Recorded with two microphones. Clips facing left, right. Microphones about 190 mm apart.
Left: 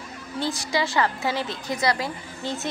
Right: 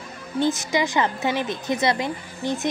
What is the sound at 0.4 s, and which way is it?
A woman's voice, 20° right (ahead or behind).